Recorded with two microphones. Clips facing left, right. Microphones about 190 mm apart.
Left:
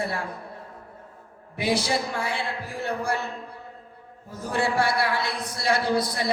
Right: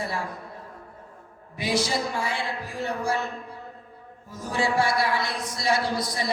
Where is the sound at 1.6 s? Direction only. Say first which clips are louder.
Left 1 dB; 60° left (ahead or behind).